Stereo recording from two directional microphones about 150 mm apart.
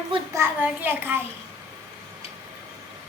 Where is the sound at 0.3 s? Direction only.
15° right (ahead or behind).